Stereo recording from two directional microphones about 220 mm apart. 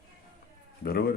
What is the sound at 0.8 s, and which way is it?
Speech, 45° left (ahead or behind).